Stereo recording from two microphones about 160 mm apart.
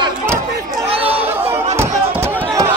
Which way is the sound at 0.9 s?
35° right (ahead or behind).